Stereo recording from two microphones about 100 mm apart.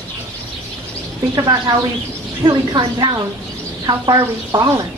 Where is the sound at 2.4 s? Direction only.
60° right (ahead or behind).